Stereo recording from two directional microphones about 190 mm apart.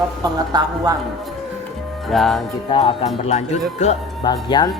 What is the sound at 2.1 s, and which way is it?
Speech, centre (ahead or behind).